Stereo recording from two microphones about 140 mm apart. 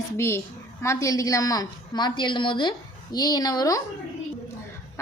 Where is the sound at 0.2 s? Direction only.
20° left (ahead or behind).